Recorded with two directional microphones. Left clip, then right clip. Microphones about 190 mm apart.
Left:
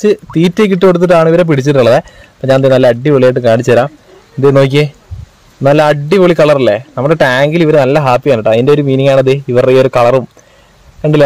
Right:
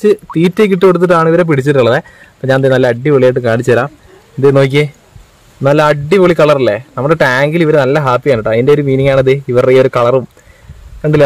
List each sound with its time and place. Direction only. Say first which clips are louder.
0.0 s a man's voice: even; centre (ahead or behind)